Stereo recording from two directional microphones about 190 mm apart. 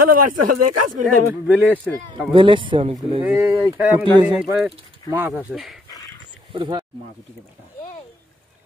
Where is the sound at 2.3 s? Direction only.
25° right (ahead or behind).